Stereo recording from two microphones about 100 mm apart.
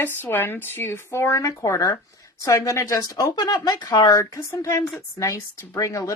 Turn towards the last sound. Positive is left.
turn(degrees=30)  # may be behind; listen again after turning